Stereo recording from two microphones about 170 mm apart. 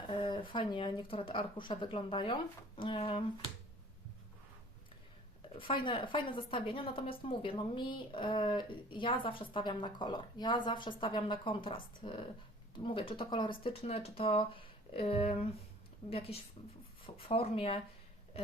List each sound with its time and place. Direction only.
0.1 s speech: 30° left (ahead or behind)
5.5 s a woman's voice: 30° left (ahead or behind)